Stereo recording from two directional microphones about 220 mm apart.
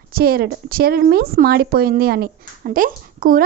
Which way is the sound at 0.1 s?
45° right (ahead or behind).